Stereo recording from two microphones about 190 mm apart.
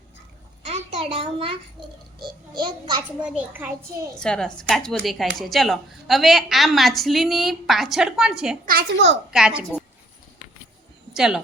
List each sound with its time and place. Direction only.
0.6 s a sound: 35° right (ahead or behind)
1.0 s a child's voice: 30° right (ahead or behind)
3.2 s a woman's voice: 10° right (ahead or behind)
4.1 s speech: 5° left (ahead or behind)
8.6 s a child's voice: 60° right (ahead or behind)
9.3 s speech: 5° right (ahead or behind)
11.1 s speech: centre (ahead or behind)